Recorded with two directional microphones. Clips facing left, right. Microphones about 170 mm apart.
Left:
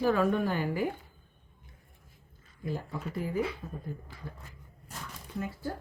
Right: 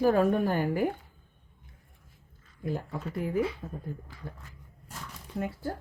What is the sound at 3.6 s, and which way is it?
Speech, 50° right (ahead or behind).